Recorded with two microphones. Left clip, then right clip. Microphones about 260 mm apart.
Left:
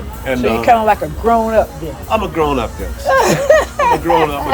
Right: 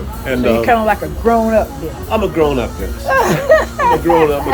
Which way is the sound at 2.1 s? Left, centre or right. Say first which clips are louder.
Right 1 dB; centre.